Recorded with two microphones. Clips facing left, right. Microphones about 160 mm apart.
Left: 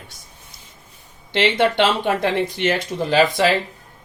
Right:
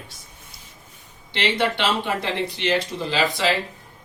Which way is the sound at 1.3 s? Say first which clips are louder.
Left 5 dB; 50° left (ahead or behind).